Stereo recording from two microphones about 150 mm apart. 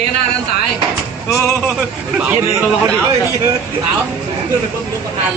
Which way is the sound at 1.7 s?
5° right (ahead or behind).